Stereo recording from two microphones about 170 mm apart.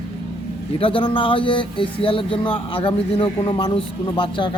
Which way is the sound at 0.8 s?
30° left (ahead or behind).